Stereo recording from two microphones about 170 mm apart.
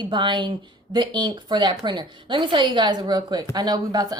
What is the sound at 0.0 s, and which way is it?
Speech, 30° right (ahead or behind).